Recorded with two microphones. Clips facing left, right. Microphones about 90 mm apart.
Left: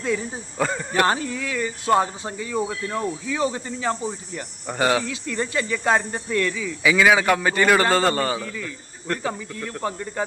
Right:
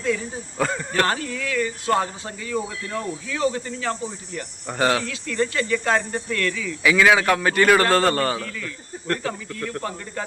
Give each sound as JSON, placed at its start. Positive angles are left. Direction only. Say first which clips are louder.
{"t": 0.0, "sound": "speech", "louder": "even", "side_deg": 20}
{"t": 0.6, "sound": "a man's voice", "louder": "even", "side_deg": 5}
{"t": 1.0, "sound": "speech", "louder": "left 2 dB", "side_deg": 20}
{"t": 4.7, "sound": "speech", "louder": "even", "side_deg": 5}
{"t": 6.8, "sound": "a man's voice", "louder": "even", "side_deg": 5}